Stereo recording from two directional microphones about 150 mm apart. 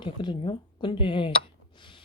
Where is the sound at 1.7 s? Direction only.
35° left (ahead or behind).